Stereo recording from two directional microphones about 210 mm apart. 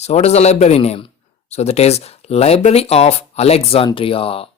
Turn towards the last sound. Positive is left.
turn(degrees=25)  # may be behind; listen again after turning